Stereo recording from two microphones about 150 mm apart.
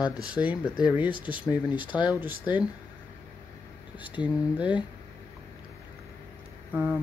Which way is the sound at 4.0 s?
35° left (ahead or behind).